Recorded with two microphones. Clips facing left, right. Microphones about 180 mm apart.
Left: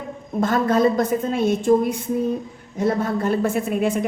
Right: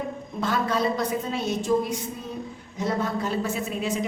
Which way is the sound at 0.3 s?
50° left (ahead or behind).